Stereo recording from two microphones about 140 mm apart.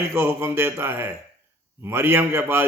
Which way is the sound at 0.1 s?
15° right (ahead or behind).